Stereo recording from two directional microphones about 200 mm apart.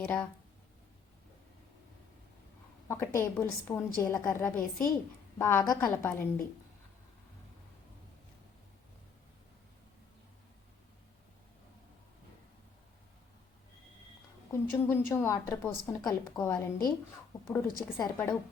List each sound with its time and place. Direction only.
0.0 s a woman's voice: 10° left (ahead or behind)
2.9 s a woman's voice: 15° left (ahead or behind)
14.5 s a woman's voice: 10° left (ahead or behind)